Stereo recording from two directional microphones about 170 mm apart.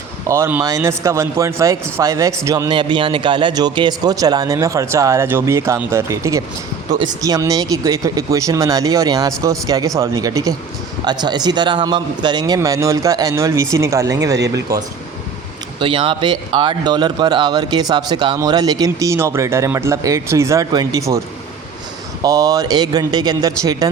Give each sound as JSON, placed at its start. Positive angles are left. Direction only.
{"t": 0.3, "sound": "speech", "side_deg": -15}
{"t": 22.2, "sound": "speech", "side_deg": -20}